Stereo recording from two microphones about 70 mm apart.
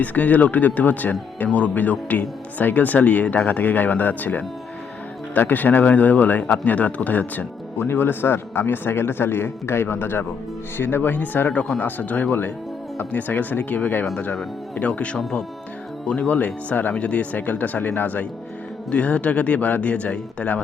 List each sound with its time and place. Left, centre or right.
0.0 s a man's voice: left
11.4 s speech: centre
15.2 s speech: centre